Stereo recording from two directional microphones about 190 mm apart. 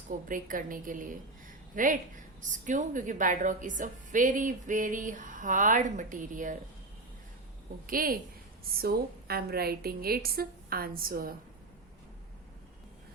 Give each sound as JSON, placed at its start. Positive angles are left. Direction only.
{"t": 0.3, "sound": "a woman's voice", "side_deg": -45}
{"t": 7.9, "sound": "a woman's voice", "side_deg": -50}